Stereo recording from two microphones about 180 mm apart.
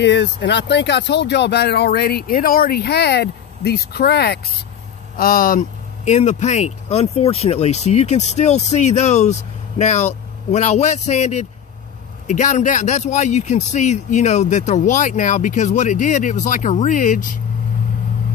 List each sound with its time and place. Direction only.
0.0 s speech: 75° left (ahead or behind)
5.1 s speech: 50° left (ahead or behind)